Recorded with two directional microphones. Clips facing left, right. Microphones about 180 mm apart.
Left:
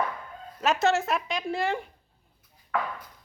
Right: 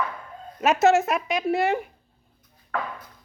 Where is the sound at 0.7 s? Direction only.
Centre (ahead or behind).